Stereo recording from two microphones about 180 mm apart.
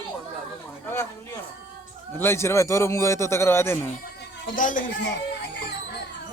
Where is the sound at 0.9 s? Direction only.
10° left (ahead or behind).